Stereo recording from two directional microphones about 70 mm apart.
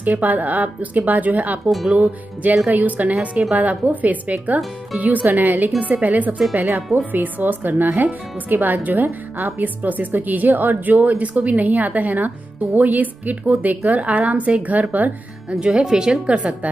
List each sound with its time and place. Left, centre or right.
0.0 s a woman's voice: right
15.6 s a woman's voice: centre